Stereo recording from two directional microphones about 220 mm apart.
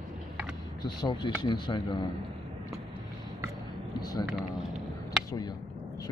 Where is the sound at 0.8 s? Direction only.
20° left (ahead or behind).